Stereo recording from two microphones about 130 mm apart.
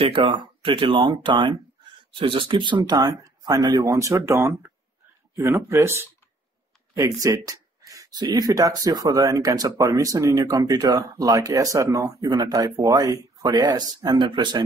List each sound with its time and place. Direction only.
0.0 s speech: 40° right (ahead or behind)